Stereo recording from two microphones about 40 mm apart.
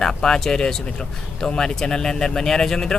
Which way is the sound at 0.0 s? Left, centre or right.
Centre.